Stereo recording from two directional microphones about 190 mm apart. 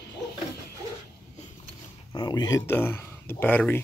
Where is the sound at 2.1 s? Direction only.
25° left (ahead or behind).